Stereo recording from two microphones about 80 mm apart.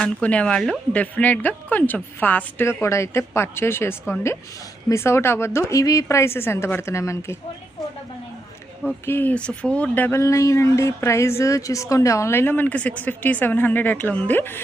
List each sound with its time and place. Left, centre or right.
0.0 s speech: centre
0.9 s a woman's voice: centre
2.8 s a woman's voice: left
5.8 s a woman's voice: left
9.0 s a woman's voice: left
9.3 s speech: centre
10.2 s a woman's voice: left